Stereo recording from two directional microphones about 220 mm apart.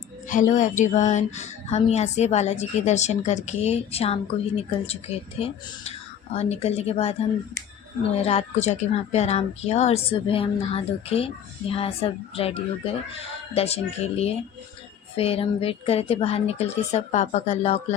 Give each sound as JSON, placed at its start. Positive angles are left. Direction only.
{"t": 0.3, "sound": "speech", "side_deg": 35}